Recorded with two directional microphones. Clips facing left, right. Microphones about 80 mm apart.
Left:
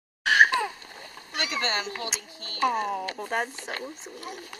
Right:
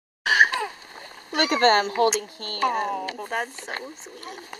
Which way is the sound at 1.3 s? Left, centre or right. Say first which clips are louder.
Right 11 dB; right.